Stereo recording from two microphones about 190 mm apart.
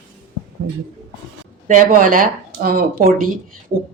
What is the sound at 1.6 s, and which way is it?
Speech, 45° right (ahead or behind).